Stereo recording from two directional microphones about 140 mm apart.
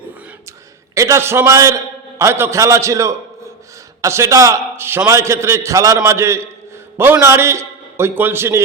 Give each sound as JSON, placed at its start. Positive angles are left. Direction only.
{"t": 0.9, "sound": "a man's voice", "side_deg": -20}